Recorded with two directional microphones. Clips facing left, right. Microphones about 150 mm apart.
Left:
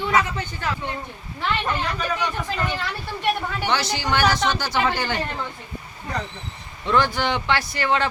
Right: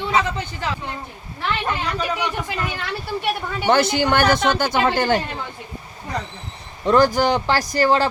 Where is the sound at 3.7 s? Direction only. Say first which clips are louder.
Right 8 dB; 55° right (ahead or behind).